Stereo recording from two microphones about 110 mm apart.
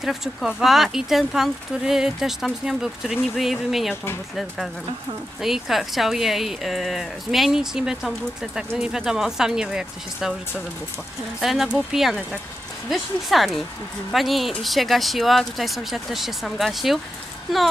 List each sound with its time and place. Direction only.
0.0 s speech: 5° right (ahead or behind)
3.9 s speech: 20° left (ahead or behind)
5.4 s speech: centre (ahead or behind)
11.4 s speech: centre (ahead or behind)